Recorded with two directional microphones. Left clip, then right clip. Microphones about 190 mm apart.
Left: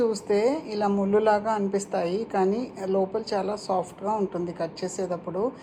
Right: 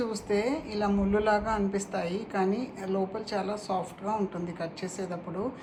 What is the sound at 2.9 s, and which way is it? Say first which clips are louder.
Speech: left 6 dB; 55° left (ahead or behind).